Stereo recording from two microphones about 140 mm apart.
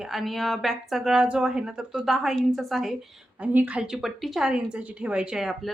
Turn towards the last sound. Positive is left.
turn(degrees=0)  # may be behind; listen again after turning